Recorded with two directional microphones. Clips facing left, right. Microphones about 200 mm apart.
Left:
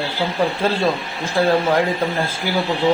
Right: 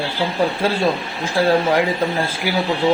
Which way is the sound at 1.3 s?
10° right (ahead or behind).